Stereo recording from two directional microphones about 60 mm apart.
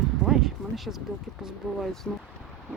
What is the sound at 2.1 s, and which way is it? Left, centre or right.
Speech, centre.